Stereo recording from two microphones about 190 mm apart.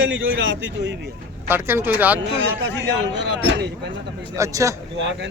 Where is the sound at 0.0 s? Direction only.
85° right.